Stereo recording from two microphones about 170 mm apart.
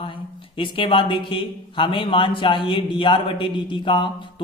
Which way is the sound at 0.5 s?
30° left (ahead or behind).